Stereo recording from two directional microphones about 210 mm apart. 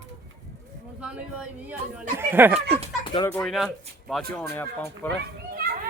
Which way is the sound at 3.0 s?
25° left (ahead or behind).